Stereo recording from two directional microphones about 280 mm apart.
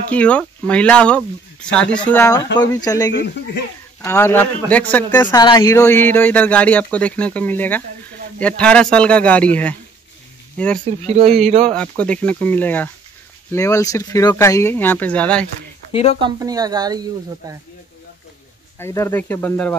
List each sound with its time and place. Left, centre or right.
0.1 s speech: centre
3.1 s speech: left
4.0 s speech: centre
10.9 s speech: right
11.6 s speech: centre
15.9 s speech: left
16.2 s speech: centre
18.8 s speech: centre